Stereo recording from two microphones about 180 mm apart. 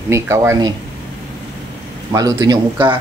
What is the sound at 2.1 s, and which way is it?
Speech, 20° right (ahead or behind).